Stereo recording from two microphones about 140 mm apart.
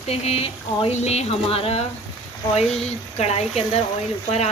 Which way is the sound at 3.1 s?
50° left (ahead or behind).